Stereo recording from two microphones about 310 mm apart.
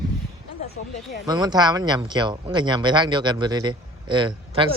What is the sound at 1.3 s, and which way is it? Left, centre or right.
Speech, centre.